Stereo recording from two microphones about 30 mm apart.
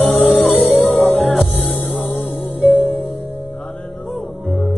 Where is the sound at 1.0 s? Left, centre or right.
Centre.